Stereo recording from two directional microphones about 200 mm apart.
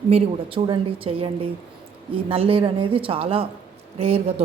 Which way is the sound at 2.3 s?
30° right (ahead or behind).